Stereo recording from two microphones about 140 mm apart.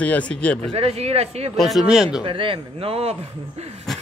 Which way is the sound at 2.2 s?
40° right (ahead or behind).